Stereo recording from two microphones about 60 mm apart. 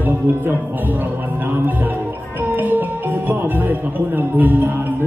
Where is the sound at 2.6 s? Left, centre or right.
Right.